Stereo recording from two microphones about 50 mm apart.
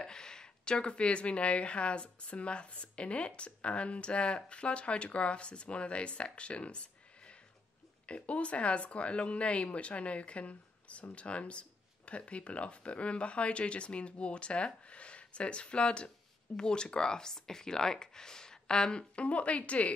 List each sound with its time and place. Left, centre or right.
0.0 s a woman's voice: centre